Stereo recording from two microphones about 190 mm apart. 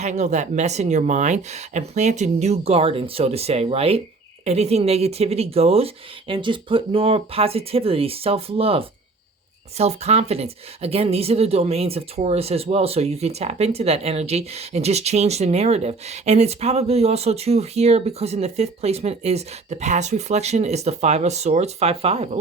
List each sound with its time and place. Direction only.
0.0 s speech: 35° right (ahead or behind)